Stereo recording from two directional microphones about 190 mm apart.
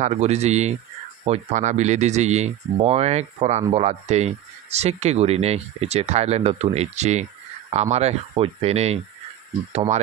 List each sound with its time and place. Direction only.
0.0 s speech: 35° right (ahead or behind)